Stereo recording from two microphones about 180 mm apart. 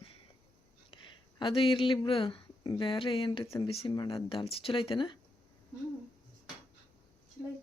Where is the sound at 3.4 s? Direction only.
15° left (ahead or behind).